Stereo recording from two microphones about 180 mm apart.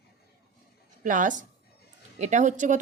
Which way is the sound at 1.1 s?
45° right (ahead or behind).